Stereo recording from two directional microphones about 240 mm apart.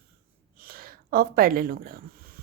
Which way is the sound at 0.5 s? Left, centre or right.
Right.